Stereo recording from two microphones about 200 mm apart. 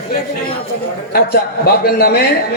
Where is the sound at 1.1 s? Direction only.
50° left (ahead or behind).